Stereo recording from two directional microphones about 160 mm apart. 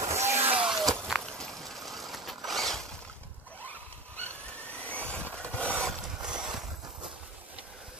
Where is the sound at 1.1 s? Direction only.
5° left (ahead or behind).